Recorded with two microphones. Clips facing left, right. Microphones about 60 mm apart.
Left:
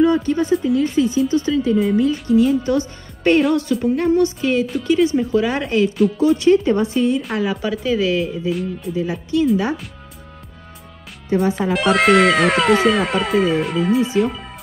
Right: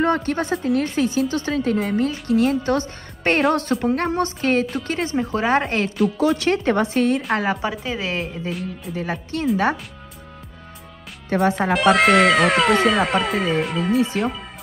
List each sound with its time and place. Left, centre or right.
0.0 s a woman's voice: right
6.1 s a woman's voice: right
7.8 s speech: right
8.5 s speech: centre
8.9 s speech: right
11.2 s speech: right
11.7 s speech: centre